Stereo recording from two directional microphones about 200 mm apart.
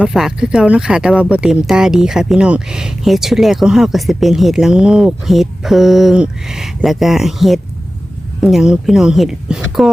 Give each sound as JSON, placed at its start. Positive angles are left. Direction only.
{"t": 0.0, "sound": "speech", "side_deg": 0}